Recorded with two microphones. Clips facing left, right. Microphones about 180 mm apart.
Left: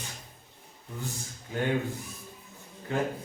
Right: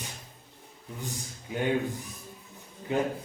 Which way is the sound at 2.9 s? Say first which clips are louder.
Right 2 dB; 20° right (ahead or behind).